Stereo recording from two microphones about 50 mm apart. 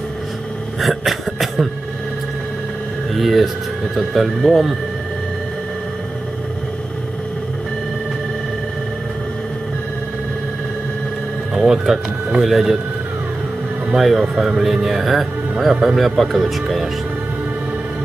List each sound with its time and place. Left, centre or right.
0.7 s cough: centre
3.2 s a man's voice: centre
11.5 s speech: centre
13.9 s a man's voice: centre